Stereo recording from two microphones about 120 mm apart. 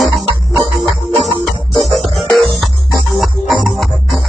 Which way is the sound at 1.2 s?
Centre (ahead or behind).